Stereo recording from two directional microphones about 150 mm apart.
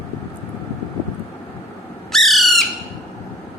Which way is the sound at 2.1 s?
Centre (ahead or behind).